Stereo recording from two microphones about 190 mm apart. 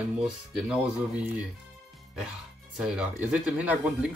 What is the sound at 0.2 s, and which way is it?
Speech, 5° right (ahead or behind).